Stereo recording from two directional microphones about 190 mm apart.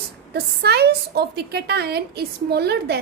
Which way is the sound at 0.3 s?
60° right (ahead or behind).